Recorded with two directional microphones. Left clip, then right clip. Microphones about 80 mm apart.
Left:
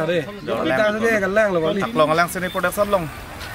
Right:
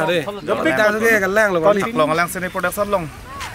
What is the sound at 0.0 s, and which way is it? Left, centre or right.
A man's voice, centre.